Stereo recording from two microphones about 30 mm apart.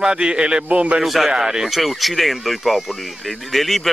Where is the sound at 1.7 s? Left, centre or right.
Centre.